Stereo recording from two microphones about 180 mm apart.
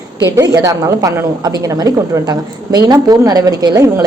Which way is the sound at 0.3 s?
20° right (ahead or behind).